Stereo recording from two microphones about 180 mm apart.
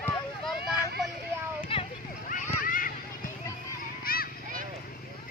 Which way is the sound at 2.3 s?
50° left (ahead or behind).